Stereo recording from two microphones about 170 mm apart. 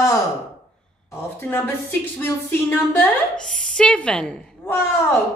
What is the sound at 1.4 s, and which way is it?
A woman's voice, 10° left (ahead or behind).